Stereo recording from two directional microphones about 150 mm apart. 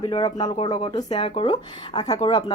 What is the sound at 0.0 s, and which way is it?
Speech, 25° left (ahead or behind).